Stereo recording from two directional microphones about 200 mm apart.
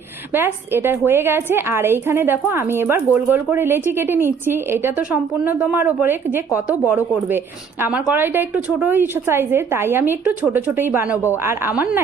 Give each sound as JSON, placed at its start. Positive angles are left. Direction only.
{"t": 0.3, "sound": "a woman's voice", "side_deg": -10}